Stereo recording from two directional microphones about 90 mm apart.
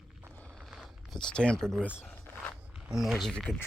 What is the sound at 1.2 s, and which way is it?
Speech, 10° left (ahead or behind).